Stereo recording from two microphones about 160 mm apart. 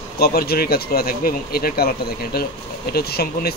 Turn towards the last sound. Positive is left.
turn(degrees=80)